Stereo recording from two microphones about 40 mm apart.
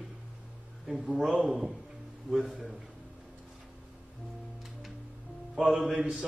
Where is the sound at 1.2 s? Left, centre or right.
Centre.